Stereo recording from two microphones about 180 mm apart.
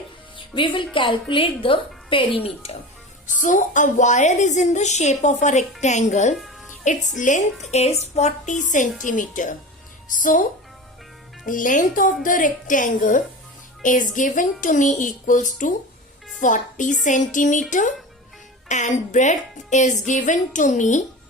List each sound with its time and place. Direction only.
0.3 s a woman's voice: 25° left (ahead or behind)
3.4 s a woman's voice: 45° left (ahead or behind)
6.3 s music: centre (ahead or behind)
6.7 s a woman's voice: 45° left (ahead or behind)
11.4 s speech: 45° left (ahead or behind)